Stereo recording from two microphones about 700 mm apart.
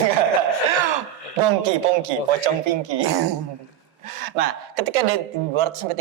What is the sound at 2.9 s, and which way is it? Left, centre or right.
Speech, right.